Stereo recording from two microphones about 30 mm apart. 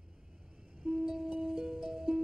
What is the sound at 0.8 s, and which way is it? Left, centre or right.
Music, right.